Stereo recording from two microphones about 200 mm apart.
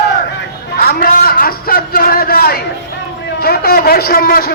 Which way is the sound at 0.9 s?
50° left (ahead or behind).